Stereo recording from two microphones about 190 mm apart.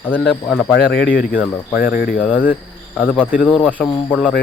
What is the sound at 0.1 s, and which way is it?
Speech, 5° left (ahead or behind).